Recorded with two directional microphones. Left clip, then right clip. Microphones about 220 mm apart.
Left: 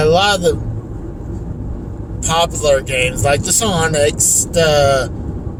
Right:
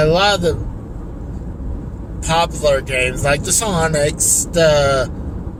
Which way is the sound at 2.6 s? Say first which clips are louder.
Left 2 dB; 20° left (ahead or behind).